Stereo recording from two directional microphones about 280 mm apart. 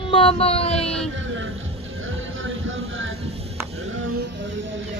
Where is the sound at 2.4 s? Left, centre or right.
Right.